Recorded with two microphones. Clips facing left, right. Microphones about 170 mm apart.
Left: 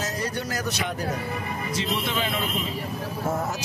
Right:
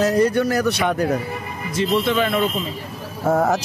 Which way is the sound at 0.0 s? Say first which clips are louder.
Right 13 dB; 60° right (ahead or behind).